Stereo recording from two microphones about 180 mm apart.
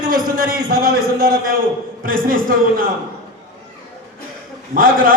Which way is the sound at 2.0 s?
50° right (ahead or behind).